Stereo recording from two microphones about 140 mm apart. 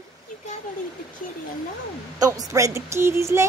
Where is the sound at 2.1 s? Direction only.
25° right (ahead or behind).